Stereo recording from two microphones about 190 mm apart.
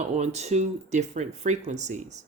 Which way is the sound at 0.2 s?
35° right (ahead or behind).